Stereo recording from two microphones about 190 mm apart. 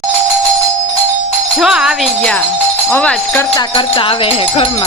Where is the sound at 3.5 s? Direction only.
25° left (ahead or behind).